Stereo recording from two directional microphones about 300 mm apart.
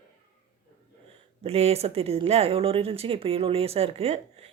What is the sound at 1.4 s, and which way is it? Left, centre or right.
Speech, centre.